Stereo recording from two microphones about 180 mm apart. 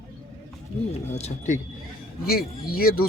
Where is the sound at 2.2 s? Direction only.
55° left (ahead or behind).